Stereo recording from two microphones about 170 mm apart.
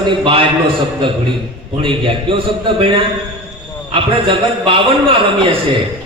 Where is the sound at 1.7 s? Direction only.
30° right (ahead or behind).